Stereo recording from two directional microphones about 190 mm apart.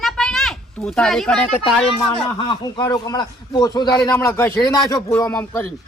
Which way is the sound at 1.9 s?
25° left (ahead or behind).